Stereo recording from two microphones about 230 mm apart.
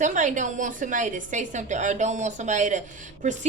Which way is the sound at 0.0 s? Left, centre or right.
Right.